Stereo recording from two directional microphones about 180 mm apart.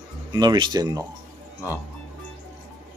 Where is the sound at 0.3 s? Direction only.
20° right (ahead or behind).